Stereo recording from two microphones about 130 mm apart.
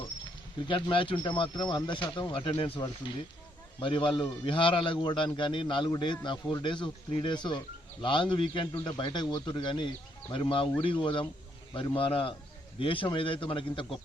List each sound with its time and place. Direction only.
0.7 s a man's voice: 40° left (ahead or behind)